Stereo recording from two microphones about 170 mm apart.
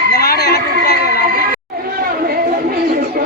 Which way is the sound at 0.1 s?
65° left (ahead or behind).